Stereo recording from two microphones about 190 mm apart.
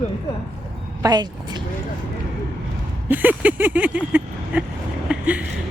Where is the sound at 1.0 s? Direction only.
20° right (ahead or behind).